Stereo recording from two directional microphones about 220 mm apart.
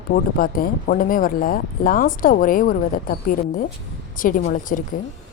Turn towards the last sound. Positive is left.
turn(degrees=35)  # may be behind; listen again after turning